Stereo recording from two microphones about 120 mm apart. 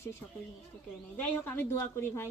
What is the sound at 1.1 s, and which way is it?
A woman's voice, 15° left (ahead or behind).